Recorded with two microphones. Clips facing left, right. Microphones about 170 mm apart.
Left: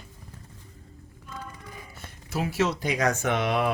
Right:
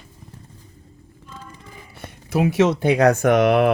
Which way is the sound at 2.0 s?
60° right (ahead or behind).